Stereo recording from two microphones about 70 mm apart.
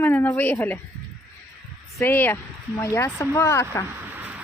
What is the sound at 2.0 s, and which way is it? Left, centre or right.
Speech, left.